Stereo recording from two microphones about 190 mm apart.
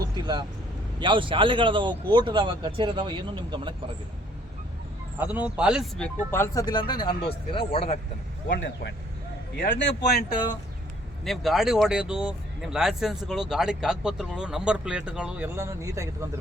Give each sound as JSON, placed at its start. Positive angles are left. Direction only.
{"t": 0.2, "sound": "a man's voice", "side_deg": -20}
{"t": 5.2, "sound": "speech", "side_deg": -10}
{"t": 6.3, "sound": "speech", "side_deg": 15}
{"t": 8.6, "sound": "speech", "side_deg": 65}
{"t": 11.3, "sound": "speech", "side_deg": 0}